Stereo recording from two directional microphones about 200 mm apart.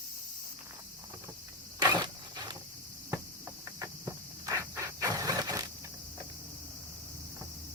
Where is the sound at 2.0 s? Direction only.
20° right (ahead or behind).